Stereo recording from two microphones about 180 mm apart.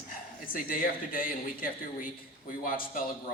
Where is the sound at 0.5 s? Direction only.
50° left (ahead or behind).